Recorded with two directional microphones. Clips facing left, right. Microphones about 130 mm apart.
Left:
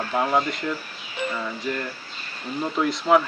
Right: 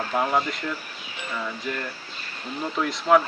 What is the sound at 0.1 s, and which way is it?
Speech, 5° left (ahead or behind).